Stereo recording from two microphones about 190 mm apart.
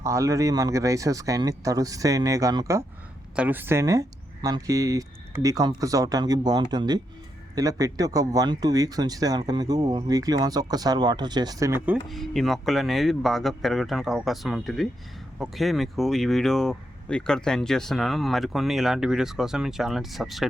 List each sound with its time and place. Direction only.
0.0 s speech: 15° right (ahead or behind)
12.0 s speech: centre (ahead or behind)